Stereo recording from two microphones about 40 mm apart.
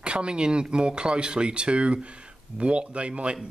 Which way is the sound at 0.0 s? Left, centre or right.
Right.